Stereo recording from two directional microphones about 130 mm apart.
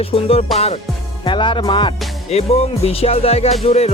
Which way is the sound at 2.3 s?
50° left (ahead or behind).